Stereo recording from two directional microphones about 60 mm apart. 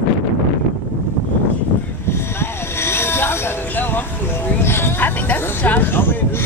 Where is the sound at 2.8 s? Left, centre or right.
Left.